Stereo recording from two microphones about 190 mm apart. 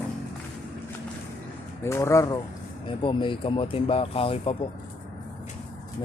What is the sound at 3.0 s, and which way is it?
Speech, 25° left (ahead or behind).